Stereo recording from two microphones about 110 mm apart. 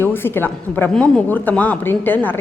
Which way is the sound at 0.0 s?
20° left (ahead or behind).